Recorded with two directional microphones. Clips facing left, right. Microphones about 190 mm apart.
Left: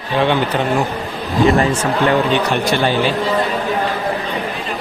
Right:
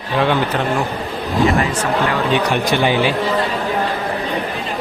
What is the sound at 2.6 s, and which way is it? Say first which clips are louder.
Speech: even; 15° right (ahead or behind).